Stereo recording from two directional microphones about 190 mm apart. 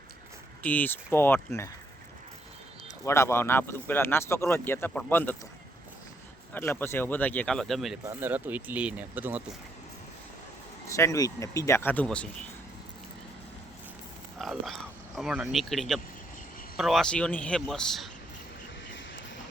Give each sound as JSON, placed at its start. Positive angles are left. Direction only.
{"t": 0.6, "sound": "speech", "side_deg": 10}
{"t": 3.0, "sound": "speech", "side_deg": 15}
{"t": 6.5, "sound": "speech", "side_deg": 10}
{"t": 10.8, "sound": "speech", "side_deg": 15}
{"t": 14.3, "sound": "speech", "side_deg": 0}
{"t": 18.9, "sound": "a sound", "side_deg": 75}